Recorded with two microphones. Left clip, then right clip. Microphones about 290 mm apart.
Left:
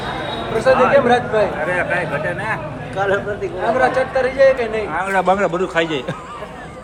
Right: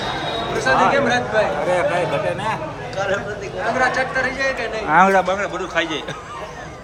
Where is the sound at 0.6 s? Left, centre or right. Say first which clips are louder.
Left 4 dB; centre.